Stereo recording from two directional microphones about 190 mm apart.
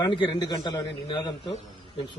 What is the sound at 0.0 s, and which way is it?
Speech, 25° left (ahead or behind).